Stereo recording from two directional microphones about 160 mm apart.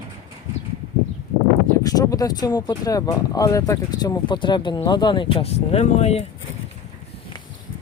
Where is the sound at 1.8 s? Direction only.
20° left (ahead or behind); by 6.3 s 40° left (ahead or behind).